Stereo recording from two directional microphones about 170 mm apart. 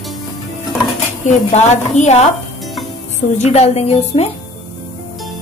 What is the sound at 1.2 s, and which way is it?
A woman's voice, 40° left (ahead or behind).